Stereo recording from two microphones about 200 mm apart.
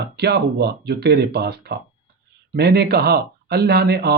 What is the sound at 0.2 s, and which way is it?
Speech, 55° right (ahead or behind).